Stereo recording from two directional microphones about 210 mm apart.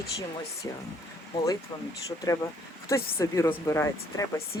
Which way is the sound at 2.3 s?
15° left (ahead or behind).